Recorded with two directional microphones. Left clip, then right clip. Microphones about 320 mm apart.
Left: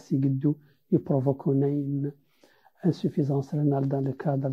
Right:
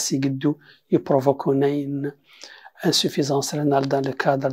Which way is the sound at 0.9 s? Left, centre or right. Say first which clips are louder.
Right 7 dB; centre.